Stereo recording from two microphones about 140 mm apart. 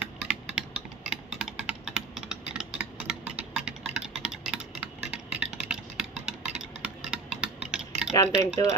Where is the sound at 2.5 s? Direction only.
5° right (ahead or behind).